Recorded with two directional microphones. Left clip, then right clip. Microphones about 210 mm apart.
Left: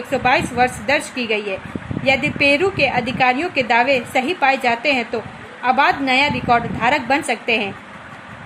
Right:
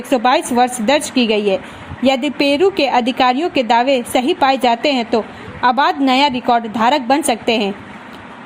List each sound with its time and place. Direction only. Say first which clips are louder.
0.1 s a woman's voice: right 3 dB; 30° right (ahead or behind)